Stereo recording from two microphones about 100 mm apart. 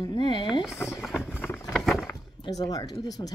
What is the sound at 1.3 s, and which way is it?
Vehicle, 20° left (ahead or behind).